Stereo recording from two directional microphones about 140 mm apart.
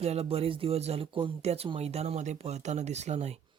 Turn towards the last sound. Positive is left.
turn(degrees=-50)  # may be behind; listen again after turning